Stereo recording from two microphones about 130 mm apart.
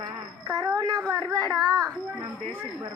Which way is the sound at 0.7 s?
25° right (ahead or behind).